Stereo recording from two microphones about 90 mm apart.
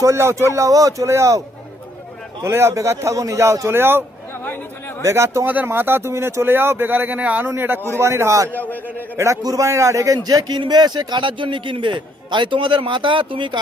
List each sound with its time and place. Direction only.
0.0 s a man's voice: 30° right (ahead or behind)
2.4 s a man's voice: 30° right (ahead or behind)
5.0 s a man's voice: 30° right (ahead or behind)
5.5 s a man's voice: 20° right (ahead or behind)
8.5 s a man's voice: 20° left (ahead or behind)
9.0 s a man's voice: 30° right (ahead or behind)
10.2 s a man's voice: 50° right (ahead or behind); by 13.6 s 65° right (ahead or behind)